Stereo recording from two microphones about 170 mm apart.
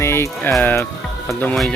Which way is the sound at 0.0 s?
15° left (ahead or behind).